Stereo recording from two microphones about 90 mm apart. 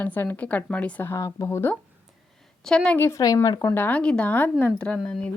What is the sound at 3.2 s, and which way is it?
Speech, 50° left (ahead or behind).